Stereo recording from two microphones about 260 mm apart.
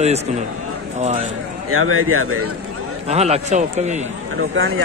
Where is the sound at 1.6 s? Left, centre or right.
Right.